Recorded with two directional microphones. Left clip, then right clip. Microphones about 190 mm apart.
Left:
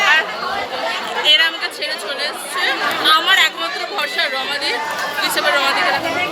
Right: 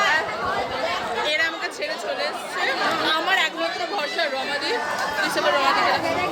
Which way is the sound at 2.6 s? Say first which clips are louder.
Left 5 dB; 15° right (ahead or behind).